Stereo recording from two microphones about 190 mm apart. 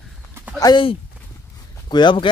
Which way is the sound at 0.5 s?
25° left (ahead or behind).